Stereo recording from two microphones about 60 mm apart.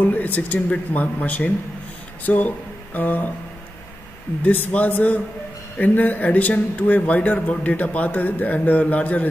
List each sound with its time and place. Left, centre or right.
0.0 s speech: left
4.4 s speech: left